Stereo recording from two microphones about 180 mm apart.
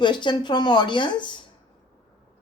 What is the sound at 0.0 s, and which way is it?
Speech, 25° left (ahead or behind).